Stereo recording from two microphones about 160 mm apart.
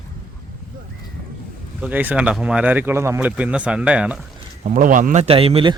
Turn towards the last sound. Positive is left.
turn(degrees=-35)  # may be behind; listen again after turning